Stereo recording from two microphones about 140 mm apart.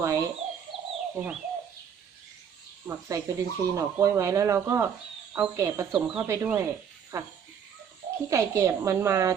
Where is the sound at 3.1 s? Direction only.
20° right (ahead or behind).